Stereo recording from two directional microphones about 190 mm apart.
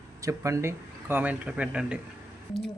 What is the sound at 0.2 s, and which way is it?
Speech, 15° right (ahead or behind).